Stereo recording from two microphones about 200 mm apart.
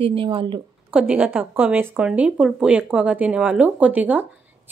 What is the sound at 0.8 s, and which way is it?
Speech, 5° right (ahead or behind).